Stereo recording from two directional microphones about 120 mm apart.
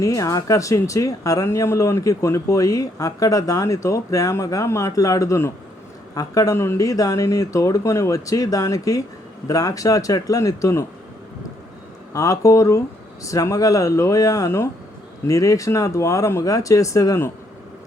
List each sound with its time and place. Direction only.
0.0 s speech: 30° left (ahead or behind)
12.1 s speech: 30° left (ahead or behind)